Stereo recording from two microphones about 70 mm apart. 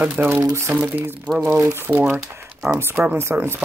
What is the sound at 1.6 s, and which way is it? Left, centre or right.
Speech, right.